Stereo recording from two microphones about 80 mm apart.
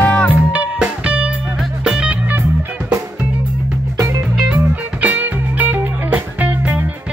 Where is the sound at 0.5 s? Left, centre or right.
Centre.